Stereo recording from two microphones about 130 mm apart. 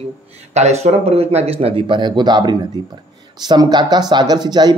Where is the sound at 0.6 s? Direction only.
60° right (ahead or behind).